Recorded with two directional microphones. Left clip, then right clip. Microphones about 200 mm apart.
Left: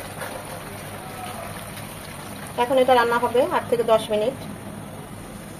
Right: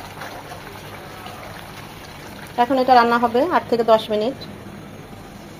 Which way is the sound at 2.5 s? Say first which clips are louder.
Right 3 dB; 30° right (ahead or behind).